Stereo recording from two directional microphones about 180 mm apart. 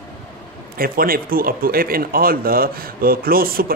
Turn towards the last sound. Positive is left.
turn(degrees=-55)  # may be behind; listen again after turning